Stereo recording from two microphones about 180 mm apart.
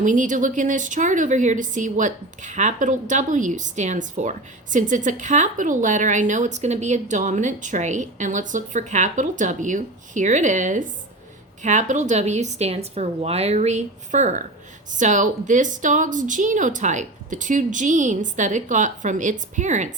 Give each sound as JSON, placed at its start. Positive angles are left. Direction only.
{"t": 0.0, "sound": "a woman's voice", "side_deg": -45}